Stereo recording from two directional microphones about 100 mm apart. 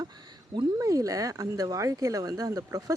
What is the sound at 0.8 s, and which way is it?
Speech, 35° right (ahead or behind).